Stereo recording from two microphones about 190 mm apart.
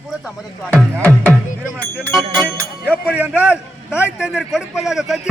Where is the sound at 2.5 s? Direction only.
10° right (ahead or behind).